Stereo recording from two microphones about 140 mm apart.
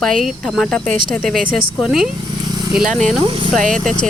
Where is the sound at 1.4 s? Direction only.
85° right.